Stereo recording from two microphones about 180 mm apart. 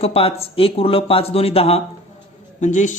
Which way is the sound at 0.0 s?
35° left (ahead or behind).